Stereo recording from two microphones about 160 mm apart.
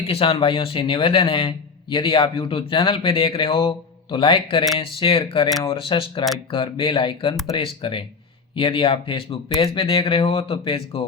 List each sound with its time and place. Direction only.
0.1 s a man's voice: 35° left (ahead or behind)